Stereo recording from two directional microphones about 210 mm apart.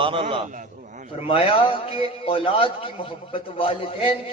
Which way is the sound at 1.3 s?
25° left (ahead or behind).